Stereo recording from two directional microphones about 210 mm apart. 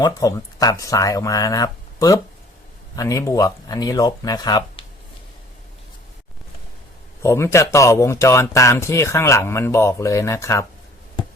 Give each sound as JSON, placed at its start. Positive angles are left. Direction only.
{"t": 0.0, "sound": "speech", "side_deg": 15}
{"t": 7.2, "sound": "speech", "side_deg": 15}